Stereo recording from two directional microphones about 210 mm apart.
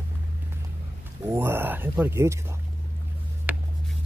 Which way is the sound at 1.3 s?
10° right (ahead or behind).